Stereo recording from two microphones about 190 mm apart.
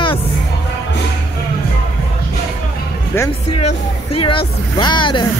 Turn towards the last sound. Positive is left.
turn(degrees=25)  # may be behind; listen again after turning